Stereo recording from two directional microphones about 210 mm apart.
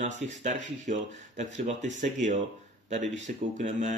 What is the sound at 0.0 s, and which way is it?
Speech, 35° right (ahead or behind).